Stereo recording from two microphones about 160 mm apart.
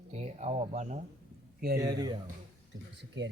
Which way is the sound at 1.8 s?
25° right (ahead or behind).